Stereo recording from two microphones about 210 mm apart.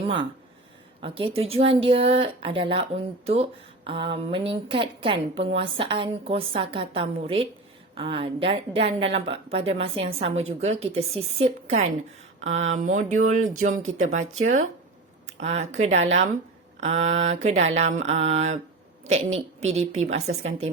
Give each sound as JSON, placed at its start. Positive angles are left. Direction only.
{"t": 0.0, "sound": "a woman's voice", "side_deg": -25}